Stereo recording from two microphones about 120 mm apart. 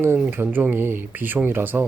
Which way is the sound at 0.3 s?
15° right (ahead or behind).